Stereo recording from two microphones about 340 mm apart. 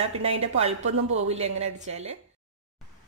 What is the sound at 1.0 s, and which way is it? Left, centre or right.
Speech, right.